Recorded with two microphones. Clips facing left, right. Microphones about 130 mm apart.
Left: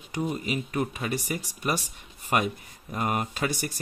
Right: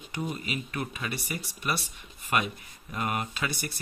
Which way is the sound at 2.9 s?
35° left (ahead or behind).